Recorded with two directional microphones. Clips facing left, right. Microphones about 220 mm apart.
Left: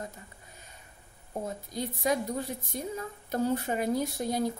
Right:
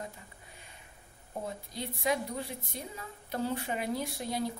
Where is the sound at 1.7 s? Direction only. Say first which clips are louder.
Left 3 dB; 45° left (ahead or behind).